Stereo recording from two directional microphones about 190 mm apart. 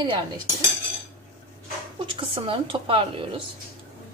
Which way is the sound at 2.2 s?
25° right (ahead or behind).